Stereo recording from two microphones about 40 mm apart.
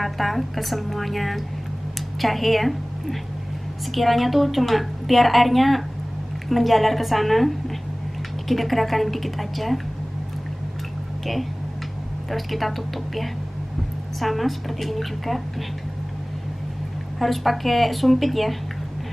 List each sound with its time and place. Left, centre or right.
0.0 s a woman's voice: centre
12.3 s a woman's voice: centre
17.2 s a woman's voice: centre